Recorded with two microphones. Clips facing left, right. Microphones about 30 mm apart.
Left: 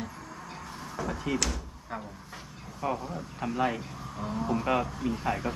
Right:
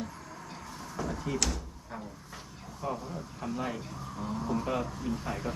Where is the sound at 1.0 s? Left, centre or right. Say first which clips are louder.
Left 3 dB; left.